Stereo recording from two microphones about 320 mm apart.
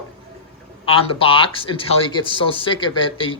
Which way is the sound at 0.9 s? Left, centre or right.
Centre.